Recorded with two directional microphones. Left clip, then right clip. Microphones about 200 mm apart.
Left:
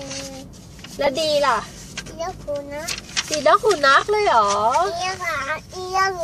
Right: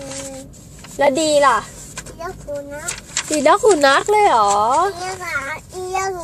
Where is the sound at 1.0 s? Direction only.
35° right (ahead or behind).